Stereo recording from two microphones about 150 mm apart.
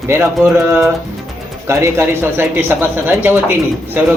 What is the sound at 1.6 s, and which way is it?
Speech, 20° right (ahead or behind).